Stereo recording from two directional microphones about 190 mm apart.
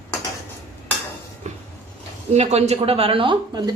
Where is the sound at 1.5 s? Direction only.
40° right (ahead or behind).